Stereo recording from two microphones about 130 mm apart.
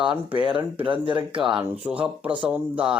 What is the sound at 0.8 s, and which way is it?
Speech, 40° right (ahead or behind).